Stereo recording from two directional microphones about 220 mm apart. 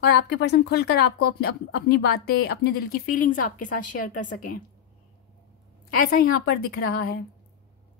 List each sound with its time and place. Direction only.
0.0 s speech: 50° left (ahead or behind)
5.9 s speech: 40° left (ahead or behind)